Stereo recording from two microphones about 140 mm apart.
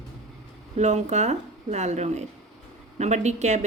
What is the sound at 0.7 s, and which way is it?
Speech, 55° right (ahead or behind).